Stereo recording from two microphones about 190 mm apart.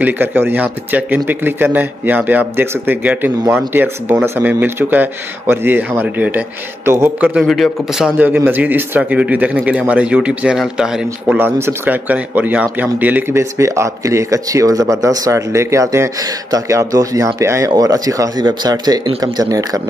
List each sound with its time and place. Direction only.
0.0 s speech: 10° right (ahead or behind)